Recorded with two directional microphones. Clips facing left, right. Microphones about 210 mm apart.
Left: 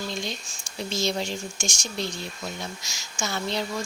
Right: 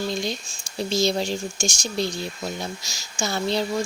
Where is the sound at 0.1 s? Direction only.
35° right (ahead or behind).